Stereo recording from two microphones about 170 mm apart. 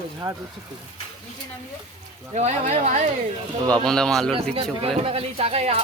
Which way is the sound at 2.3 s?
40° right (ahead or behind).